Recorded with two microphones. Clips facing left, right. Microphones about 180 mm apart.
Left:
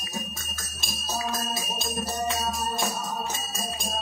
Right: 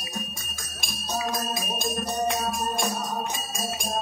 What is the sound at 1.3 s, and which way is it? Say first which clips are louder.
Music: right 2 dB; 15° right (ahead or behind).